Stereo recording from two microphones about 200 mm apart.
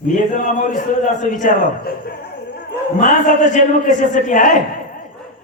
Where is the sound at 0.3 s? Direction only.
40° left (ahead or behind).